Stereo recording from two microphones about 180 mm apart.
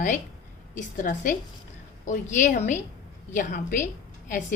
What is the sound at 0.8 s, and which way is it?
A woman's voice, 45° left (ahead or behind).